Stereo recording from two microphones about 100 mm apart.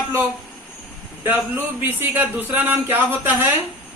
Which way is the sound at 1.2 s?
20° right (ahead or behind).